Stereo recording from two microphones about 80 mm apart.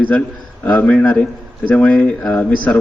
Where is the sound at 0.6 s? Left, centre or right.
Centre.